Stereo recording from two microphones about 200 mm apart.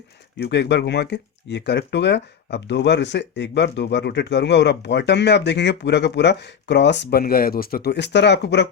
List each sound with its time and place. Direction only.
0.3 s speech: 55° left (ahead or behind)